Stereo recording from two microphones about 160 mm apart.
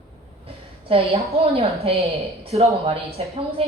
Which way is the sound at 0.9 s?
40° right (ahead or behind).